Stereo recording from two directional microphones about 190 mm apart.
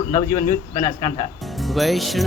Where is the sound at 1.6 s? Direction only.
Centre (ahead or behind).